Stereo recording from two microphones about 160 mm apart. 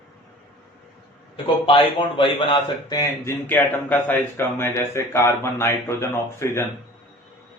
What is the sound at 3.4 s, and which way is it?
Speech, 10° left (ahead or behind).